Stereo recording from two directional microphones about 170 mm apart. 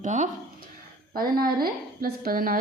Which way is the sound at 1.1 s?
60° right (ahead or behind).